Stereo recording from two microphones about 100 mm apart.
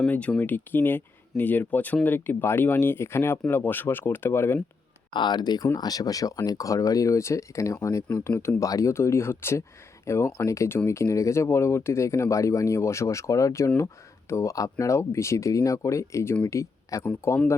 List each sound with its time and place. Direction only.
0.0 s speech: 15° left (ahead or behind)
5.1 s speech: 50° left (ahead or behind); by 17.1 s 30° left (ahead or behind)